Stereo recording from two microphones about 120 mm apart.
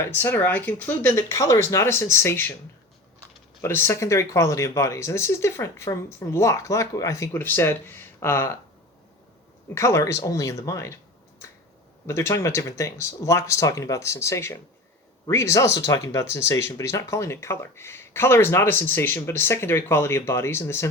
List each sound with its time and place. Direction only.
0.0 s speech: 20° left (ahead or behind)
3.6 s speech: 20° left (ahead or behind)
9.7 s speech: 25° left (ahead or behind)
12.0 s speech: 20° left (ahead or behind)